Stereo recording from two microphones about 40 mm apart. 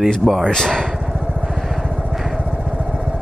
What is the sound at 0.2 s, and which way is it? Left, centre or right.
Speech, centre.